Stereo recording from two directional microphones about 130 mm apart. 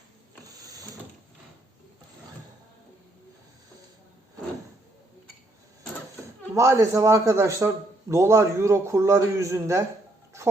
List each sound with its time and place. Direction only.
0.4 s printer: 25° right (ahead or behind)
6.5 s a man's voice: 20° right (ahead or behind)